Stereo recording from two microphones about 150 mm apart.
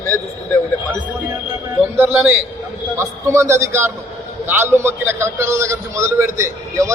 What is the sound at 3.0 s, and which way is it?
A man's voice, 20° right (ahead or behind).